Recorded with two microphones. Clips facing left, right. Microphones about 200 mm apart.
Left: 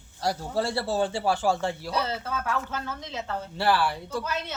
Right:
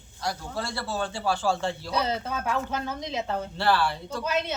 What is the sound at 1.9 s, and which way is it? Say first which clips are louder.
Speech: right 1 dB; 15° right (ahead or behind).